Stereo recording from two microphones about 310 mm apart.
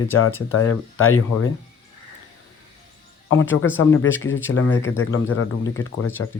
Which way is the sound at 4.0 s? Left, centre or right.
Left.